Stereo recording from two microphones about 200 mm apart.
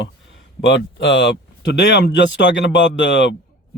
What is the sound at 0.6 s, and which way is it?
Speech, 60° left (ahead or behind).